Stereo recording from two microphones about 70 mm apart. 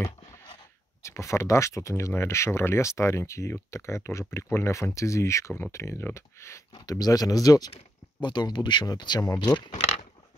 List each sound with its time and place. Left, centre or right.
1.0 s speech: left
6.9 s speech: left
8.2 s speech: left